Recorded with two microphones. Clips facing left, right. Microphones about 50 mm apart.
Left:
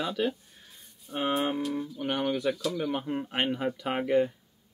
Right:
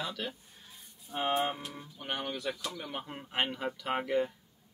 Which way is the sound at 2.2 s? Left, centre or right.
Left.